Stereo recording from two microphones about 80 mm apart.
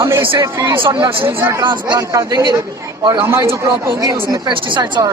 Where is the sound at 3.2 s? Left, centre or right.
Right.